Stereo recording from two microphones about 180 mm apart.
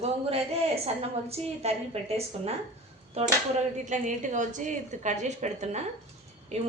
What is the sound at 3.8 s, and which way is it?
A woman's voice, 45° right (ahead or behind).